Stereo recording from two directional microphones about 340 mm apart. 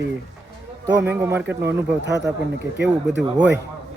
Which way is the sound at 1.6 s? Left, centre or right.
Right.